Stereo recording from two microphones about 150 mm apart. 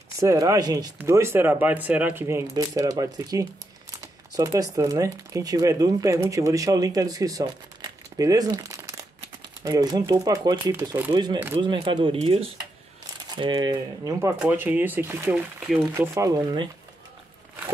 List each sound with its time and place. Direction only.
0.2 s speech: 20° right (ahead or behind)
11.6 s speech: 30° right (ahead or behind)
14.4 s speech: 10° right (ahead or behind)